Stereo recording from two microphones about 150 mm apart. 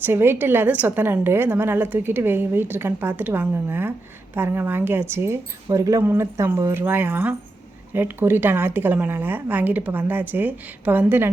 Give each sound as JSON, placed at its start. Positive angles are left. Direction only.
{"t": 0.0, "sound": "a woman's voice", "side_deg": -15}